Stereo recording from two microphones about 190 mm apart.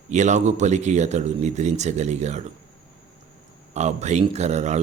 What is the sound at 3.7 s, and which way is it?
A man's voice, 35° right (ahead or behind).